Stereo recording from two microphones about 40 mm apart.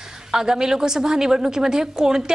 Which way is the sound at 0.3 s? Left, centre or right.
Centre.